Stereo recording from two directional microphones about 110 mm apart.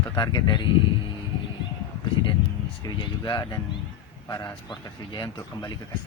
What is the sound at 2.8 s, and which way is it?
Speech, 40° left (ahead or behind).